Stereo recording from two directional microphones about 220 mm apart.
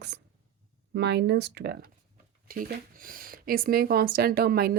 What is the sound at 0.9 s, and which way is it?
Speech, 50° right (ahead or behind).